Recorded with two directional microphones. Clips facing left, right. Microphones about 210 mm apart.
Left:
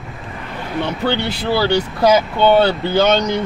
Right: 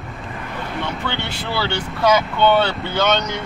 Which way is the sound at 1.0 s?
35° left (ahead or behind).